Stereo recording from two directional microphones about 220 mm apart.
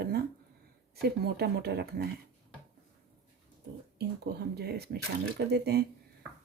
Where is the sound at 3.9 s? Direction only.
45° right (ahead or behind).